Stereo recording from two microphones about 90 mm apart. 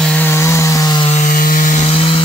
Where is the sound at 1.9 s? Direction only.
90° left.